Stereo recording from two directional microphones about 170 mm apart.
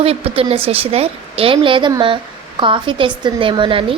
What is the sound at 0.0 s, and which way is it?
A woman's voice, 35° right (ahead or behind).